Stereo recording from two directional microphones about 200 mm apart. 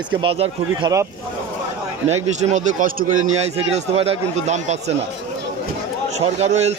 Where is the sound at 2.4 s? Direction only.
35° right (ahead or behind).